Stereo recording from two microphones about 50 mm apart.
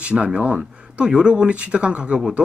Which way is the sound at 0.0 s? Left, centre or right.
Centre.